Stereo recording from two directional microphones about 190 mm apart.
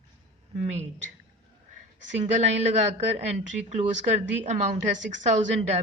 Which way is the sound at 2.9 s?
35° right (ahead or behind).